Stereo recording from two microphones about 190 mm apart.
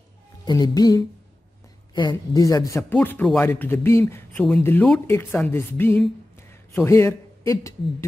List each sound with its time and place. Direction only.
0.5 s a man's voice: 20° left (ahead or behind)